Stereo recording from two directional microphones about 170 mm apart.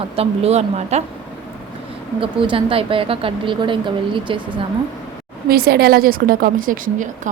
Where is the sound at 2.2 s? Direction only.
30° right (ahead or behind).